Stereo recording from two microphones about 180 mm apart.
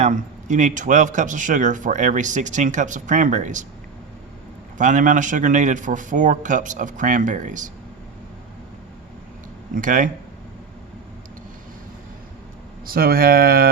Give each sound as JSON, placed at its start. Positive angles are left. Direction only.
{"t": 0.0, "sound": "speech", "side_deg": -45}
{"t": 4.8, "sound": "speech", "side_deg": -45}
{"t": 9.7, "sound": "speech", "side_deg": -45}
{"t": 12.8, "sound": "speech", "side_deg": -55}